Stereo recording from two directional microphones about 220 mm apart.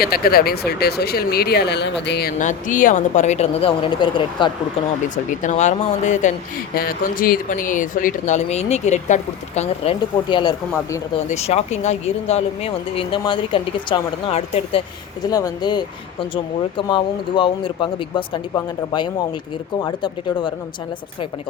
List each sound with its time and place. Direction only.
0.0 s speech: 45° left (ahead or behind)
2.4 s speech: 35° left (ahead or behind)
5.1 s speech: 35° left (ahead or behind)
19.8 s speech: 20° left (ahead or behind)